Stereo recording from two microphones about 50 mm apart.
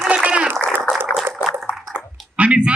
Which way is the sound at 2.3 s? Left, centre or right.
Right.